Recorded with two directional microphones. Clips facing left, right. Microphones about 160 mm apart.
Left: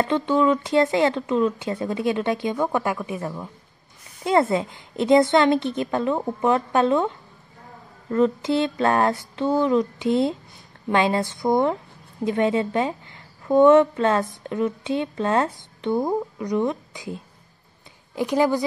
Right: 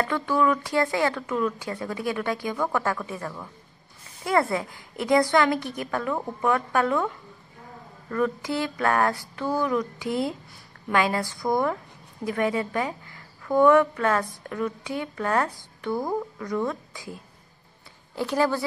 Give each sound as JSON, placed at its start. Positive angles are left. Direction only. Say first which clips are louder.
{"t": 0.0, "sound": "a woman's voice", "louder": "left 4 dB", "side_deg": 20}